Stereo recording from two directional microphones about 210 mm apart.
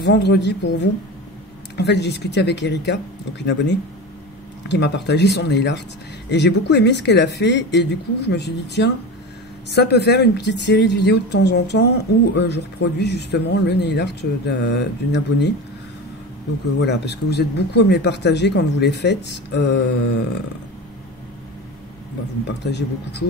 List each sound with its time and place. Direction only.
0.0 s speech: 55° left (ahead or behind)
16.8 s speech: 55° left (ahead or behind)
22.5 s speech: 55° left (ahead or behind)